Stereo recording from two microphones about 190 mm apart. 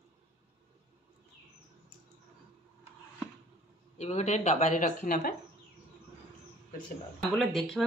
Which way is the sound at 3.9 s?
35° left (ahead or behind).